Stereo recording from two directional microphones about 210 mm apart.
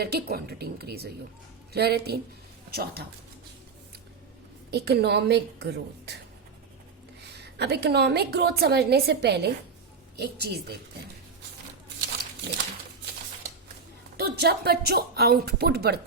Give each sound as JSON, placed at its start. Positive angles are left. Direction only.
{"t": 0.0, "sound": "a woman's voice", "side_deg": -50}
{"t": 4.7, "sound": "a woman's voice", "side_deg": -50}
{"t": 7.2, "sound": "a woman's voice", "side_deg": -55}
{"t": 14.2, "sound": "a woman's voice", "side_deg": -50}